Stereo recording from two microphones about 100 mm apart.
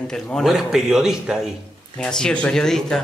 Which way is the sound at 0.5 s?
5° right (ahead or behind).